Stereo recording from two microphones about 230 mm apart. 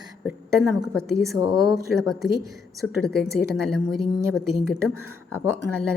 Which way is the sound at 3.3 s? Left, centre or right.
Centre.